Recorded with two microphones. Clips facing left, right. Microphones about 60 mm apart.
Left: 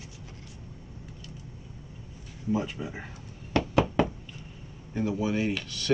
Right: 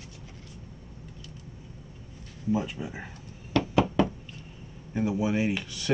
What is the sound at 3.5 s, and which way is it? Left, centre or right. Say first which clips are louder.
Knock: right 1 dB; left.